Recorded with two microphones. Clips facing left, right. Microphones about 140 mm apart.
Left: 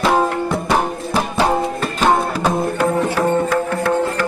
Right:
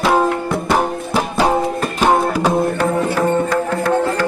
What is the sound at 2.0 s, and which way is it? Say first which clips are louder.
Music: right 2 dB; 10° right (ahead or behind).